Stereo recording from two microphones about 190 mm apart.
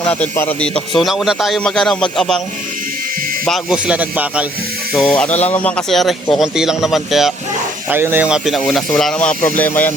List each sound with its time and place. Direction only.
0.1 s speech: 10° left (ahead or behind)
3.4 s speech: centre (ahead or behind)
4.9 s speech: 5° left (ahead or behind)
5.3 s speech: 35° left (ahead or behind)
5.5 s speech: 5° left (ahead or behind)